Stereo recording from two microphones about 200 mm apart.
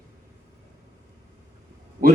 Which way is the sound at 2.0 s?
45° right (ahead or behind).